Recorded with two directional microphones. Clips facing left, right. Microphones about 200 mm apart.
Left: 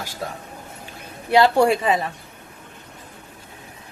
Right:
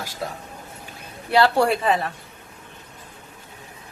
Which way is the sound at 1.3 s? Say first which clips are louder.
Left 2 dB; 15° left (ahead or behind).